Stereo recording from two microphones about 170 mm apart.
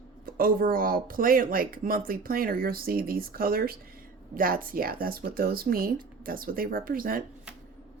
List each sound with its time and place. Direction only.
0.3 s speech: 60° right (ahead or behind)